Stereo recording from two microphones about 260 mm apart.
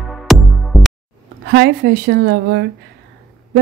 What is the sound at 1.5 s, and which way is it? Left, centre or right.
A woman's voice, right.